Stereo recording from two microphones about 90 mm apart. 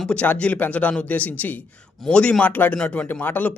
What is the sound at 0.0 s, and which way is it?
A man's voice, 10° left (ahead or behind).